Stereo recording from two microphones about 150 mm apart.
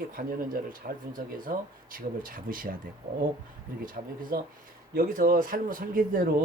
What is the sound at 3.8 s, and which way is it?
Speech, 70° right (ahead or behind).